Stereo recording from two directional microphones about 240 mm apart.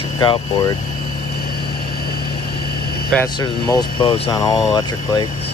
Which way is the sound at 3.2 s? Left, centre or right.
Centre.